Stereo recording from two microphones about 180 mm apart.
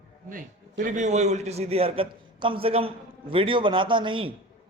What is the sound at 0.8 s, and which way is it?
A man's voice, 45° right (ahead or behind).